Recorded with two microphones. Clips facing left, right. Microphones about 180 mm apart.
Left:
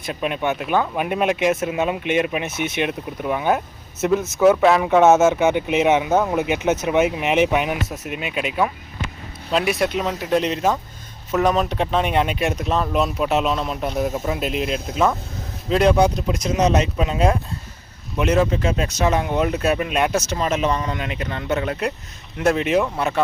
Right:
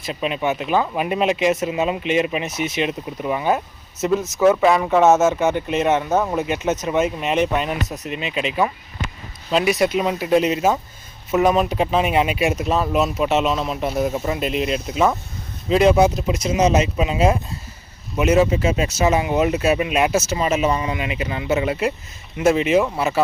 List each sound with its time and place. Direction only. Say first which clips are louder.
0.0 s speech: right 1 dB; centre (ahead or behind)
6.4 s speech: left 1 dB; 70° left (ahead or behind)
7.5 s speech: left 1 dB; 5° left (ahead or behind)